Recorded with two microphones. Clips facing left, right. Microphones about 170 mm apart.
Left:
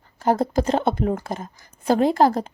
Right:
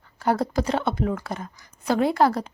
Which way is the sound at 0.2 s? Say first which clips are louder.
Left 3 dB; 40° left (ahead or behind).